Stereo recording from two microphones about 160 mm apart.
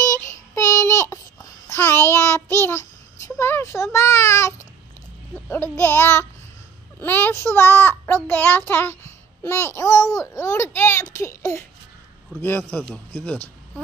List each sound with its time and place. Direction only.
0.0 s child singing: 20° left (ahead or behind)
5.5 s a child's voice: 15° left (ahead or behind)